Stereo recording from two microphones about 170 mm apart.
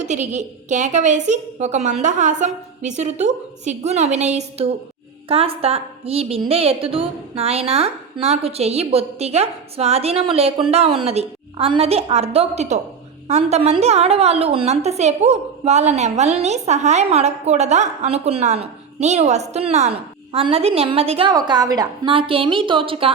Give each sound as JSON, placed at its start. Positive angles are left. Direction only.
{"t": 0.0, "sound": "a woman's voice", "side_deg": -45}